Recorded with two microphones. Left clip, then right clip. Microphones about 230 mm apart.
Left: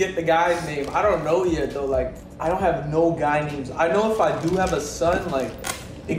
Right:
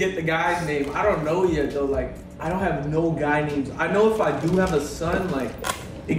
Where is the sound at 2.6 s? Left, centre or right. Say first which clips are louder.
Left 3 dB; centre.